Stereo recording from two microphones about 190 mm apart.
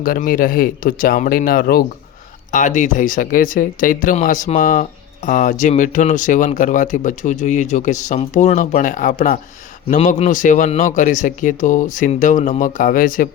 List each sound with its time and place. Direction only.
0.0 s speech: 45° left (ahead or behind)